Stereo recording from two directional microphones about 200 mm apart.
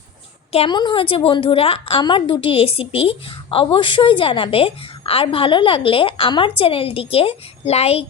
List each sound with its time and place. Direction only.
0.5 s a woman's voice: 25° left (ahead or behind)